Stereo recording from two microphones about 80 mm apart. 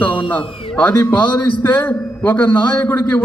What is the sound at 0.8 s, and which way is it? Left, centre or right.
A man's voice, left.